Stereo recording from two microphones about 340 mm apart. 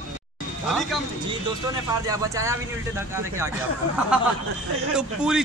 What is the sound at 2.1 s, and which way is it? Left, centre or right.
Speech, centre.